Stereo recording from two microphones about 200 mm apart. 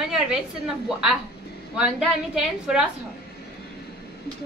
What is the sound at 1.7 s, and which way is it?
A woman's voice, 5° right (ahead or behind).